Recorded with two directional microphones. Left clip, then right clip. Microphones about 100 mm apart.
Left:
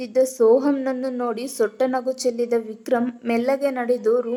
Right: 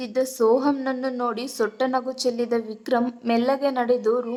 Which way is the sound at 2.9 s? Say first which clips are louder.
Even; 30° right (ahead or behind).